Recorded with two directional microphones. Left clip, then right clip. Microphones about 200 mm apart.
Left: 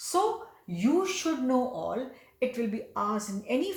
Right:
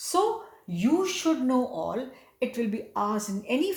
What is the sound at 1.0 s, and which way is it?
Speech, 30° right (ahead or behind).